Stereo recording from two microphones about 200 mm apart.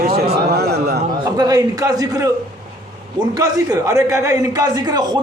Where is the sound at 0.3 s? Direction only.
55° right (ahead or behind).